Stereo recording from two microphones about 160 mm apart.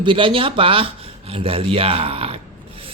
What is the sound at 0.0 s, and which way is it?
Speech, 30° right (ahead or behind).